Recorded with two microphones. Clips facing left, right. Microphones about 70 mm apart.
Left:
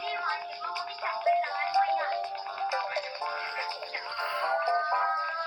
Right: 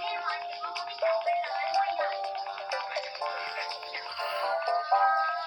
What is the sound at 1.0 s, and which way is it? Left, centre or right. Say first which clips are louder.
Music: even; left.